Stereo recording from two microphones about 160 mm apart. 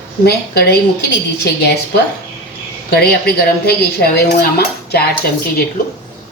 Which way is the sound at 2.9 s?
85° left.